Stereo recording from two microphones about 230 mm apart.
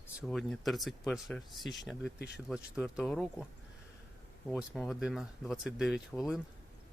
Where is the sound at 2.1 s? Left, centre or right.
Left.